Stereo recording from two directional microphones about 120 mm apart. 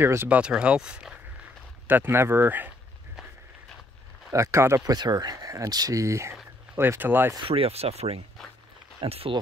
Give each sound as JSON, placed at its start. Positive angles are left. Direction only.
{"t": 0.0, "sound": "speech", "side_deg": -20}
{"t": 1.9, "sound": "speech", "side_deg": -15}
{"t": 4.3, "sound": "speech", "side_deg": -25}
{"t": 6.3, "sound": "a sound", "side_deg": -10}
{"t": 6.9, "sound": "speech", "side_deg": -15}
{"t": 7.4, "sound": "speech", "side_deg": -50}